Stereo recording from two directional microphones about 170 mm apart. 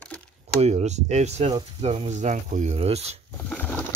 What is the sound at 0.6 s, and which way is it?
Speech, 40° right (ahead or behind).